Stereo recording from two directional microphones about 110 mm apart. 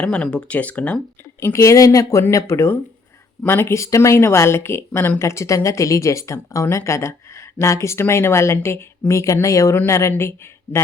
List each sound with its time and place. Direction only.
0.0 s speech: 10° left (ahead or behind)
1.4 s speech: 25° left (ahead or behind)